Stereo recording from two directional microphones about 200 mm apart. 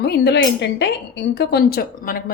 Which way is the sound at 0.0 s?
55° left (ahead or behind).